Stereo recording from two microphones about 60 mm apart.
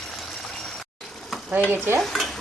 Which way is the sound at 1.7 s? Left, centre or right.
Right.